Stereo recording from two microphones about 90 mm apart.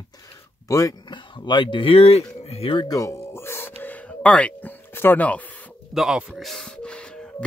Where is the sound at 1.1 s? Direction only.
60° left (ahead or behind); by 2.8 s 85° left.